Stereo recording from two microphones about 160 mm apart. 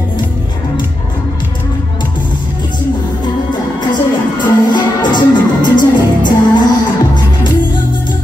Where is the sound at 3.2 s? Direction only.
25° left (ahead or behind).